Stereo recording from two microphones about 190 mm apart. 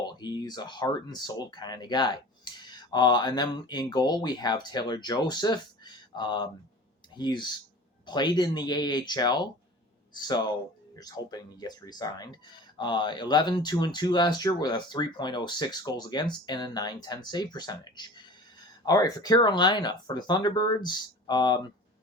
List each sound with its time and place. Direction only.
0.0 s speech: 20° left (ahead or behind)